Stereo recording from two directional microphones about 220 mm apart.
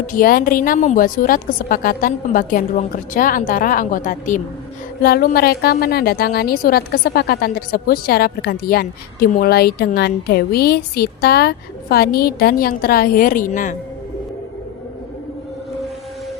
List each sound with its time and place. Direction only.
0.1 s a woman's voice: 40° left (ahead or behind)